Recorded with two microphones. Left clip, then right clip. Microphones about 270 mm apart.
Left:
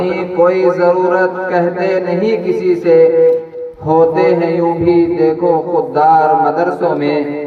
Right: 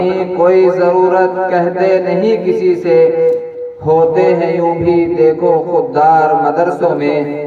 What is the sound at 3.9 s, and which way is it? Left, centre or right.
Mantra, right.